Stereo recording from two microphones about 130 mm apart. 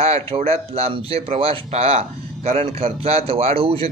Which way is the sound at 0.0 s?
50° right (ahead or behind).